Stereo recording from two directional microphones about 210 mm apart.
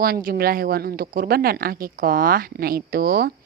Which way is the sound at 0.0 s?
45° right (ahead or behind).